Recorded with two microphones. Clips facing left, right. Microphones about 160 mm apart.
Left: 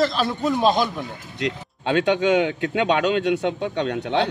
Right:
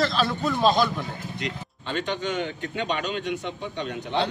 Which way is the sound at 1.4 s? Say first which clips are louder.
Left 7 dB; 70° left (ahead or behind).